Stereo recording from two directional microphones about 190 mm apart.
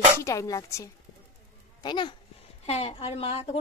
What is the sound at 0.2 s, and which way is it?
A woman's voice, 15° left (ahead or behind).